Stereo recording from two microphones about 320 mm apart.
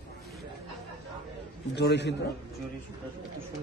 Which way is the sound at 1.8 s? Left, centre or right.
Left.